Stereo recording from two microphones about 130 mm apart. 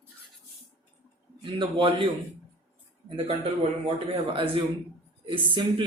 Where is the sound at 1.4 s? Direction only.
40° right (ahead or behind).